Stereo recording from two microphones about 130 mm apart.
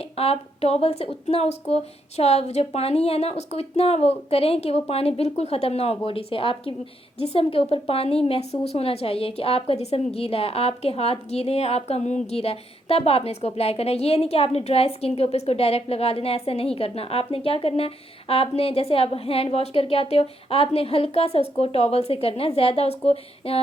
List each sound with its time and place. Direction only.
0.0 s a woman's voice: 50° left (ahead or behind)